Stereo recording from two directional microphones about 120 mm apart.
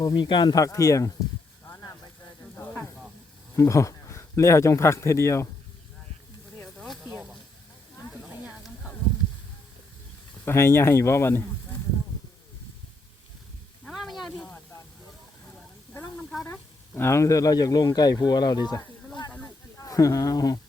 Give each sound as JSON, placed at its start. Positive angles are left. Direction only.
{"t": 0.0, "sound": "speech", "side_deg": 35}
{"t": 3.5, "sound": "speech", "side_deg": 25}
{"t": 6.7, "sound": "snake", "side_deg": 0}
{"t": 7.0, "sound": "snake", "side_deg": -15}
{"t": 10.4, "sound": "speech", "side_deg": 20}
{"t": 13.8, "sound": "sizzle", "side_deg": 0}
{"t": 16.5, "sound": "speech", "side_deg": 20}